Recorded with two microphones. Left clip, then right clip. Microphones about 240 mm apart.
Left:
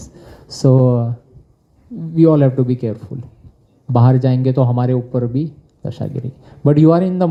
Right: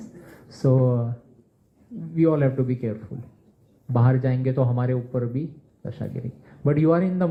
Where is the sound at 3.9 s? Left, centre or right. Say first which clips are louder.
Left 8 dB; left.